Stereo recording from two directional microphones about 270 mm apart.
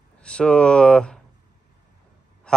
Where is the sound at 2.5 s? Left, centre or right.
Centre.